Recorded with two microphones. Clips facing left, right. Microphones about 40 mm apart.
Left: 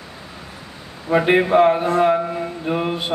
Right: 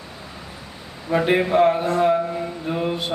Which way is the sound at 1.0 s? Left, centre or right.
Left.